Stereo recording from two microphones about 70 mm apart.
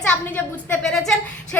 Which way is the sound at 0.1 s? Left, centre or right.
Centre.